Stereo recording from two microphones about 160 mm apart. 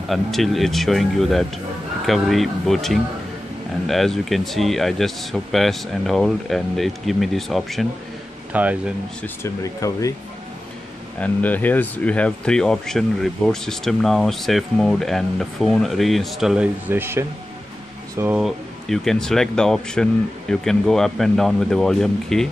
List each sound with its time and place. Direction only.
0.1 s speech: centre (ahead or behind)
9.2 s speech: 20° left (ahead or behind)
11.1 s speech: 10° left (ahead or behind); by 18.4 s 15° right (ahead or behind)
18.4 s speech: 5° left (ahead or behind)